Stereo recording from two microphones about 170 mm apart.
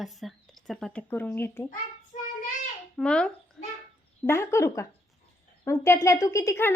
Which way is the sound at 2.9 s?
5° left (ahead or behind).